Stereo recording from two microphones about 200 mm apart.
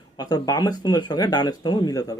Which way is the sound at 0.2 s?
20° left (ahead or behind).